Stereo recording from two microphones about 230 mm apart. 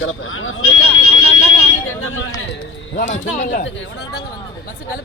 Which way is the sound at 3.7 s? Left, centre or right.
Left.